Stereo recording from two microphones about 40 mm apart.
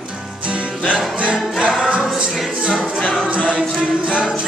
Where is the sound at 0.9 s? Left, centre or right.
Right.